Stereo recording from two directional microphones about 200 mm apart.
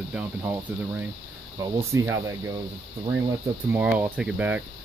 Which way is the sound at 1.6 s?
15° right (ahead or behind).